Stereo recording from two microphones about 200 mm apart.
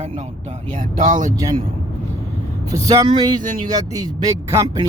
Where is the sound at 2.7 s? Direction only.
20° right (ahead or behind).